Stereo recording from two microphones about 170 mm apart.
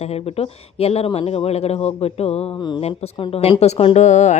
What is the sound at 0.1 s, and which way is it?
Speech, 35° left (ahead or behind).